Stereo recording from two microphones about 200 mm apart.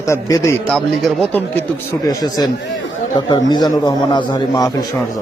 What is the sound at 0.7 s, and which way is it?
Speech, centre (ahead or behind).